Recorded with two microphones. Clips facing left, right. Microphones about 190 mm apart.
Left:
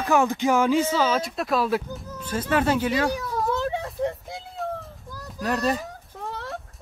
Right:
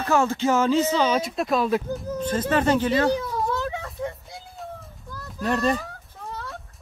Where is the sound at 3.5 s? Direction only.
35° left (ahead or behind).